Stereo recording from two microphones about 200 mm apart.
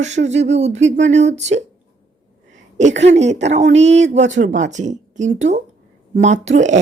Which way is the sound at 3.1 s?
35° right (ahead or behind).